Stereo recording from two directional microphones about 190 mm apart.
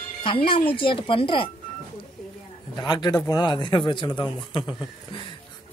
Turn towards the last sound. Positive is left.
turn(degrees=25)  # may be behind; listen again after turning